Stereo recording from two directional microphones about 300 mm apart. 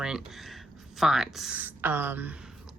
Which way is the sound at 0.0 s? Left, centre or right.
Centre.